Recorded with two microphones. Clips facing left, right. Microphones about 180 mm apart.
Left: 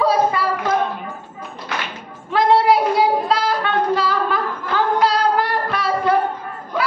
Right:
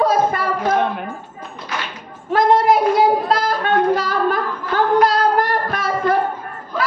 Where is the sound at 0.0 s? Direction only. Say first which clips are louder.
Even; 50° right (ahead or behind).